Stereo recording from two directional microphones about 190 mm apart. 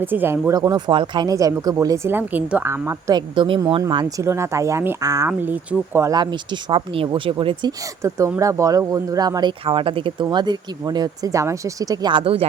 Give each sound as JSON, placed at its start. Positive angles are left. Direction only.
{"t": 0.0, "sound": "speech", "side_deg": -10}